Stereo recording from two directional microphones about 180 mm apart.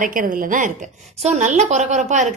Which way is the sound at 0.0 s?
50° right (ahead or behind).